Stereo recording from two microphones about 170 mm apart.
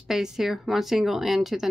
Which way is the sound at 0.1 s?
Centre (ahead or behind).